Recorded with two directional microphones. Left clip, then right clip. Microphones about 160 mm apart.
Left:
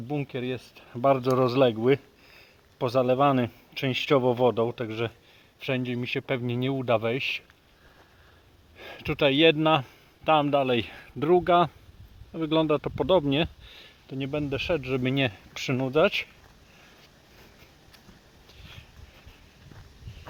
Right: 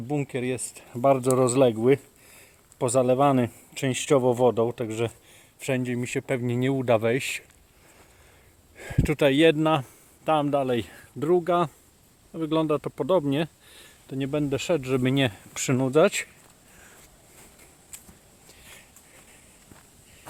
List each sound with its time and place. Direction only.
0.1 s speech: 25° right (ahead or behind)
0.9 s speech: 20° right (ahead or behind); by 7.3 s 40° right (ahead or behind)
8.7 s speech: 35° right (ahead or behind); by 14.2 s 10° right (ahead or behind)
14.2 s speech: 25° right (ahead or behind)
18.6 s a sound: 20° right (ahead or behind)